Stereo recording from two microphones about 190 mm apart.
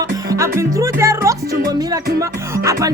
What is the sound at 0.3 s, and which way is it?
Music, 15° right (ahead or behind).